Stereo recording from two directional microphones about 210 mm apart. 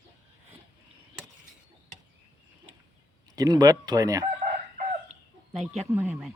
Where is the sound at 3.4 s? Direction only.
15° right (ahead or behind).